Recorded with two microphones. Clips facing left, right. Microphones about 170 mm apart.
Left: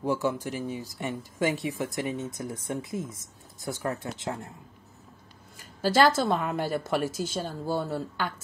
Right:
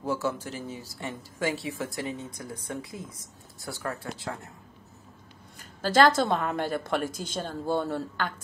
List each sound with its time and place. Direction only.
0.0 s speech: 15° left (ahead or behind)
5.8 s speech: 10° left (ahead or behind)